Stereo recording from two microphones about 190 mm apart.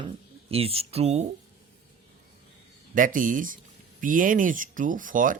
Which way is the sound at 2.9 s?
45° right (ahead or behind).